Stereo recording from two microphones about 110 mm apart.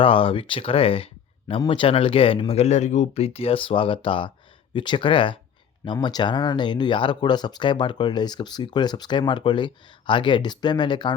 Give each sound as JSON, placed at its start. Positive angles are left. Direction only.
{"t": 0.0, "sound": "speech", "side_deg": 55}